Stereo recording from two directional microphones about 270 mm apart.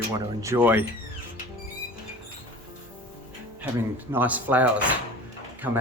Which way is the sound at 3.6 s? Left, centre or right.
Centre.